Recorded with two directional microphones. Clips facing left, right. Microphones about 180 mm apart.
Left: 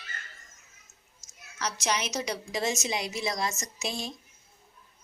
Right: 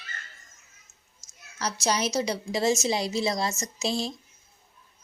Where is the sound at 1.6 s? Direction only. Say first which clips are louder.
Right 4 dB; 30° right (ahead or behind).